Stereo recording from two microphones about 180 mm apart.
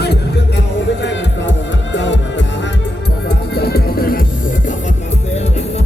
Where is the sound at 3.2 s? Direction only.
60° left (ahead or behind).